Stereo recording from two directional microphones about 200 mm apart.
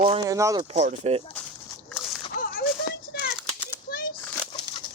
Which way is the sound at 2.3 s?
45° left (ahead or behind).